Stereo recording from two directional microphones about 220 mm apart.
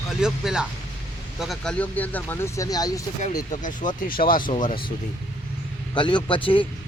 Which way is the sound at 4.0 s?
40° left (ahead or behind).